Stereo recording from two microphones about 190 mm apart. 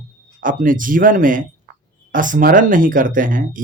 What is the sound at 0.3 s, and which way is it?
A man's voice, 45° right (ahead or behind).